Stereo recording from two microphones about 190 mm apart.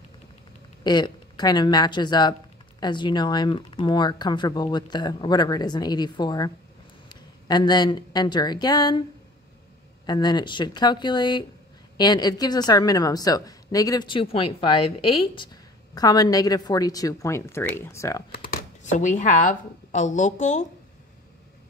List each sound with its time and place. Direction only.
0.8 s a woman's voice: 20° left (ahead or behind)
10.0 s a woman's voice: 20° left (ahead or behind)
18.3 s speech: 45° left (ahead or behind)